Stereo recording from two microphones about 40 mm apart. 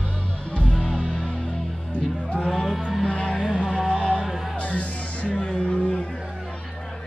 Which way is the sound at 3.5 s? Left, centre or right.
Right.